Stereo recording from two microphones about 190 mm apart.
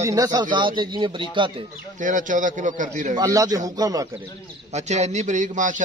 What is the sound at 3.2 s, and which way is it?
Speech, 20° right (ahead or behind).